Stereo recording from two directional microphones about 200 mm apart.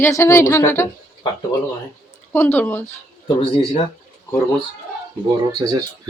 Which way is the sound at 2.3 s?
10° left (ahead or behind).